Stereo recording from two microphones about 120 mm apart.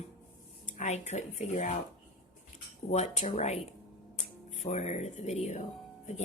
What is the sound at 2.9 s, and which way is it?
Speech, 70° left (ahead or behind).